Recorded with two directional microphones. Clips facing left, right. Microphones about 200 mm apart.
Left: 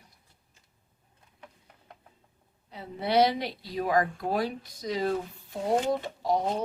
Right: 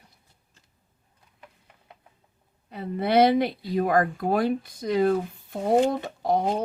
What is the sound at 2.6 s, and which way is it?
Speech, 55° right (ahead or behind).